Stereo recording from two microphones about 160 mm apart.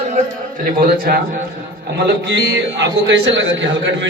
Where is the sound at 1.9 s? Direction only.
90° right.